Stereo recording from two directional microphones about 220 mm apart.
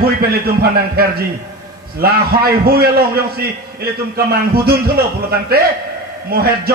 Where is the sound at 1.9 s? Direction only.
45° right (ahead or behind).